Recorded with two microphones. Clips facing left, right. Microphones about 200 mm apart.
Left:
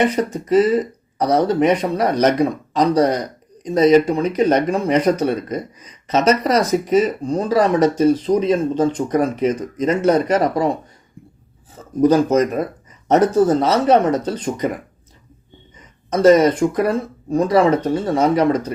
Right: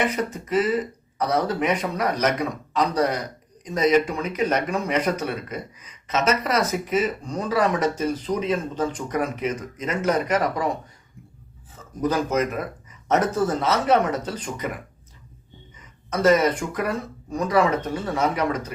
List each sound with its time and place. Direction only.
0.0 s speech: 30° left (ahead or behind)
11.9 s speech: 30° left (ahead or behind)
16.0 s speech: 35° left (ahead or behind)